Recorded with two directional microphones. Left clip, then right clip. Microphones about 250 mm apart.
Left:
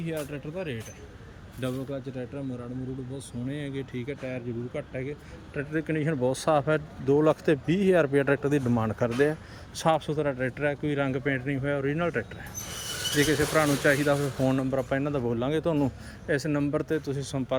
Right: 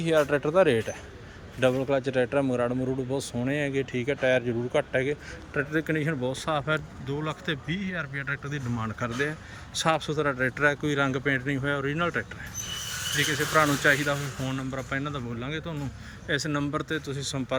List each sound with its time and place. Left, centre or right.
0.3 s speech: right
1.6 s a man's voice: centre
3.4 s speech: centre